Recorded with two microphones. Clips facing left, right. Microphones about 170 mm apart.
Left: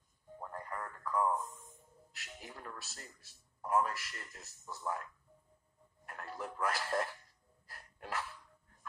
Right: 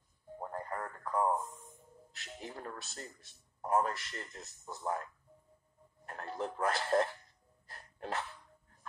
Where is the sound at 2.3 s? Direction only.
35° right (ahead or behind).